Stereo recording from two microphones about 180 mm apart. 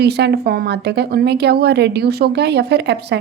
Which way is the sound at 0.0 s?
65° right (ahead or behind).